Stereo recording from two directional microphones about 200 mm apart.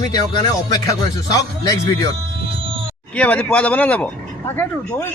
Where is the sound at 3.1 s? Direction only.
5° left (ahead or behind).